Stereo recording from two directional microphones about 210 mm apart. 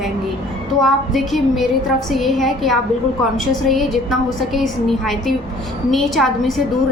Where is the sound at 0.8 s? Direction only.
Centre (ahead or behind).